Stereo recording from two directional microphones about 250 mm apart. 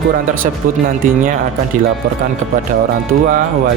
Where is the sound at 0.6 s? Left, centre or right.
Right.